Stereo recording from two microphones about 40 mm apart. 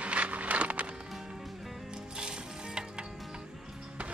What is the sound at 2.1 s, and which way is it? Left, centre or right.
Music, right.